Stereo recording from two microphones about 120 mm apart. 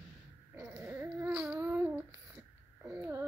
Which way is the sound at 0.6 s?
15° right (ahead or behind).